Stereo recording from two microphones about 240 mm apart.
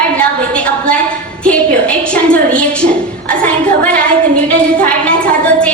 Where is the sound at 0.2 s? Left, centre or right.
Centre.